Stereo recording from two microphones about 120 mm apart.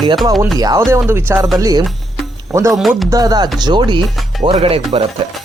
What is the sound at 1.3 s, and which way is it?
Speech, centre (ahead or behind).